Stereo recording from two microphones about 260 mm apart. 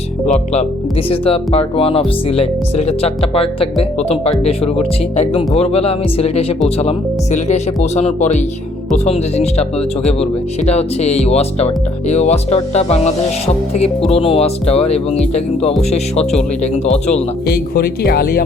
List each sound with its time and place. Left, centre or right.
0.3 s speech: left